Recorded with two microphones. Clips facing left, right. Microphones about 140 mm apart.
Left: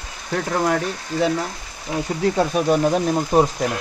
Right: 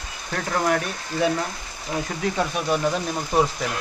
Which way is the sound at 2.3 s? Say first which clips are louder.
Left 5 dB; 35° left (ahead or behind).